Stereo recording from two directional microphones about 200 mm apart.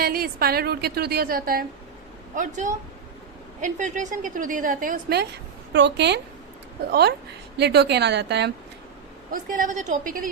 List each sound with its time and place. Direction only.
0.0 s a woman's voice: 50° right (ahead or behind)
7.5 s a woman's voice: 55° right (ahead or behind)
9.3 s a woman's voice: 45° right (ahead or behind)